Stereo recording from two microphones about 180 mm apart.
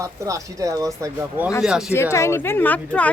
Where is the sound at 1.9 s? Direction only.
15° left (ahead or behind).